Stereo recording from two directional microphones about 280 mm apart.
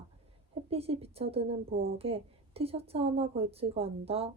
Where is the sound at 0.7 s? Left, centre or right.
Right.